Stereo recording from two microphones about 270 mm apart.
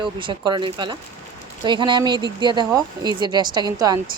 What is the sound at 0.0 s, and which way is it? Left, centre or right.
Speech, centre.